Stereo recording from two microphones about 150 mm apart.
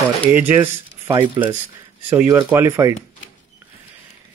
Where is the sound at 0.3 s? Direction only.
15° right (ahead or behind).